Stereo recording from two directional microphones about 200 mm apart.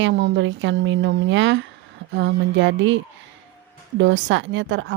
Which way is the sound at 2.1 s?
65° right (ahead or behind).